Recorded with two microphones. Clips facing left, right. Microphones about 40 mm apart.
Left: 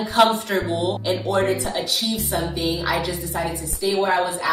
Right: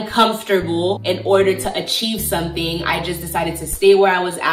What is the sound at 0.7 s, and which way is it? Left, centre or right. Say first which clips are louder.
Speech: right 4 dB; right.